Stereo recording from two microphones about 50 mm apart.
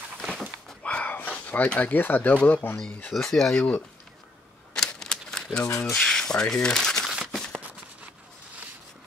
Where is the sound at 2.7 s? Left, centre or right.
Centre.